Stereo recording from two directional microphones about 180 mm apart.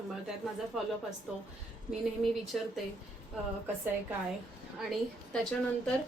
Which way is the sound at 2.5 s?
Centre (ahead or behind).